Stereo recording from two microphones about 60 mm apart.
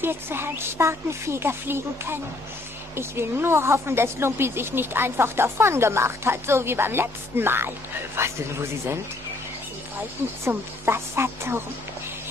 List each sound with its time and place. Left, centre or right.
0.0 s a woman's voice: right
10.5 s a woman's voice: right